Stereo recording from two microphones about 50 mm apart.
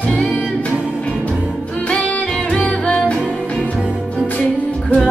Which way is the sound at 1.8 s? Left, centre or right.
Left.